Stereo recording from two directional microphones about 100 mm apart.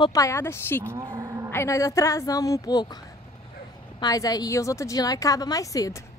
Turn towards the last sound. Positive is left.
turn(degrees=35)  # may be behind; listen again after turning